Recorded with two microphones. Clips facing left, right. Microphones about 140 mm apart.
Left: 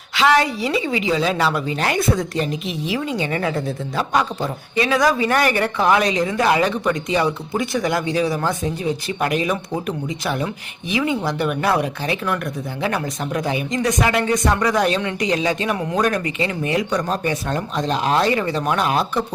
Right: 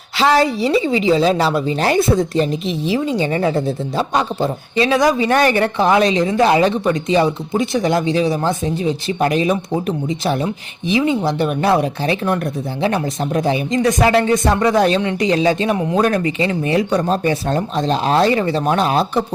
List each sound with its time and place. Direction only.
0.2 s a woman's voice: 35° right (ahead or behind)